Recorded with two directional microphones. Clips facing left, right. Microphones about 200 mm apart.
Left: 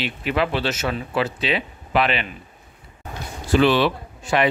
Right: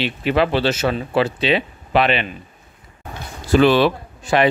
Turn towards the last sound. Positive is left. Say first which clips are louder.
# right 3 dB
turn(degrees=-35)  # may be behind; listen again after turning